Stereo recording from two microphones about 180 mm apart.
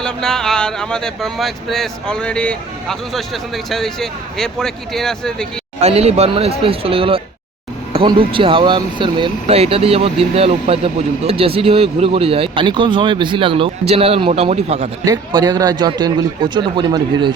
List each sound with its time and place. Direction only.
0.0 s speech: 5° left (ahead or behind)
5.8 s speech: 35° right (ahead or behind)
15.0 s a man's voice: 20° right (ahead or behind)